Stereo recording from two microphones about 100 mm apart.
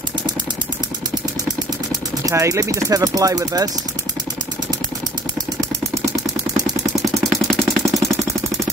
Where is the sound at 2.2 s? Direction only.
30° right (ahead or behind).